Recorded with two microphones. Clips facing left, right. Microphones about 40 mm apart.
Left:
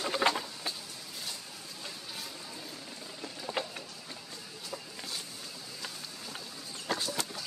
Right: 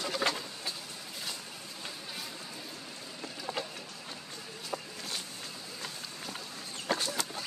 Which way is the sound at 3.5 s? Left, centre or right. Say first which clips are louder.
Left 2 dB; right.